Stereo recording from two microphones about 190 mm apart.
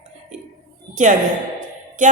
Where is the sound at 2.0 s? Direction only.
40° right (ahead or behind).